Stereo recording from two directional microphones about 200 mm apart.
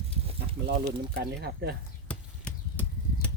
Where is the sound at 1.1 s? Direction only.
50° right (ahead or behind).